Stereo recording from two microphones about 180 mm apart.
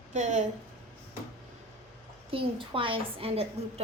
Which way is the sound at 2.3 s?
30° right (ahead or behind).